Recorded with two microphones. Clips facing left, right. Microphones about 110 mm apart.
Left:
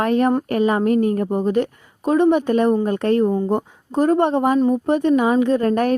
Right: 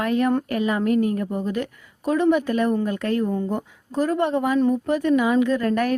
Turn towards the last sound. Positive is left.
turn(degrees=30)  # may be behind; listen again after turning